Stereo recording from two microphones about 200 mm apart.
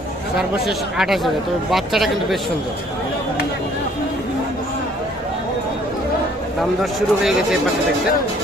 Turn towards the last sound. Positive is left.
turn(degrees=0)  # may be behind; listen again after turning